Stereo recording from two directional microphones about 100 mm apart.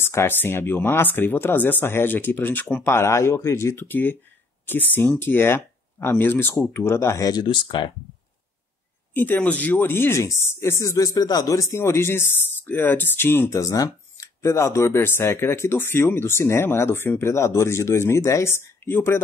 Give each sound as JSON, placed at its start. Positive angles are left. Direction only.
{"t": 0.0, "sound": "speech", "side_deg": 25}
{"t": 7.4, "sound": "speech", "side_deg": 55}
{"t": 9.1, "sound": "speech", "side_deg": 20}
{"t": 13.6, "sound": "speech", "side_deg": 35}